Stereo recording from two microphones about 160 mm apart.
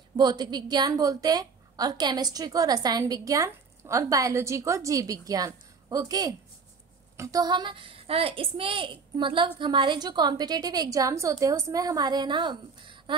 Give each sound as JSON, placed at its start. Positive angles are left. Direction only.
{"t": 0.2, "sound": "a woman's voice", "side_deg": -25}